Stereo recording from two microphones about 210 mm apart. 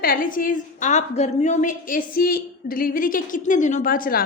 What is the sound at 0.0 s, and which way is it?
A woman's voice, 45° left (ahead or behind).